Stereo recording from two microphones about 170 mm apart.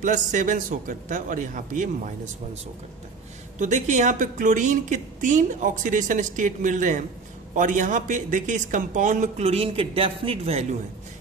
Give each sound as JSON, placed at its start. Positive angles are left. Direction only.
{"t": 0.0, "sound": "a woman's voice", "side_deg": -50}
{"t": 3.5, "sound": "a woman's voice", "side_deg": -45}